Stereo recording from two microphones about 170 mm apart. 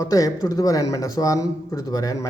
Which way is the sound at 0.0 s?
20° left (ahead or behind).